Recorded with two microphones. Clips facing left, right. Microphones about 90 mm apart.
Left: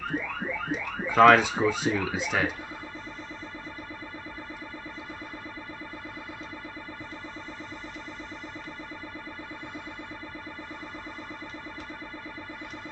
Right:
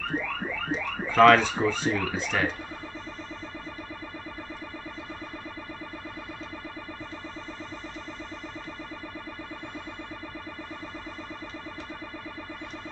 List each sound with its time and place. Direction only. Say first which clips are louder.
0.1 s music: right 1 dB; 35° right (ahead or behind)
0.7 s a sound: right 1 dB; 10° left (ahead or behind)
2.1 s speech: even; 10° left (ahead or behind)